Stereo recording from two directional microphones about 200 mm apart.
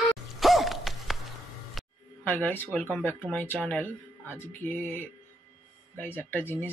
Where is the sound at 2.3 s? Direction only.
10° left (ahead or behind).